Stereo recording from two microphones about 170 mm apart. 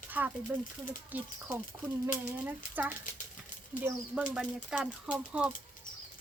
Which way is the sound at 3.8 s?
10° right (ahead or behind).